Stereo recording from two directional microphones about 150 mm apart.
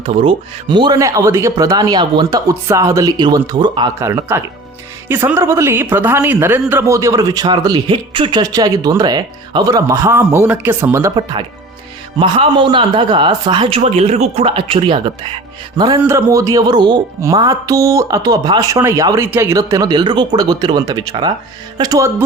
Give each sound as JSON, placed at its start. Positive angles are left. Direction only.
{"t": 0.0, "sound": "speech", "side_deg": -40}
{"t": 11.1, "sound": "a man's voice", "side_deg": -30}
{"t": 16.0, "sound": "speech", "side_deg": -20}